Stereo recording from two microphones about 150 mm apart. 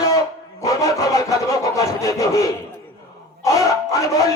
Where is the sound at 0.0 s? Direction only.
25° left (ahead or behind).